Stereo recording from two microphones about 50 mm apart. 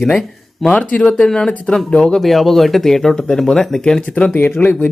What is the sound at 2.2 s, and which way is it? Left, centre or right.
Speech, centre.